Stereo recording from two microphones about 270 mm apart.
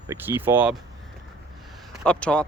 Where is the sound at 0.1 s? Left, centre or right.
Centre.